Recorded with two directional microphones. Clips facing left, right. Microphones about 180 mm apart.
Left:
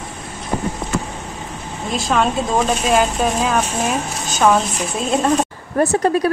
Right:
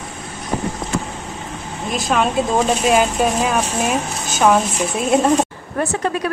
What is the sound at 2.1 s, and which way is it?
Speech, 10° right (ahead or behind).